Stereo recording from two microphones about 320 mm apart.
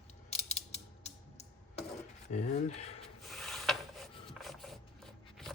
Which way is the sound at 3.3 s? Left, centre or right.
Centre.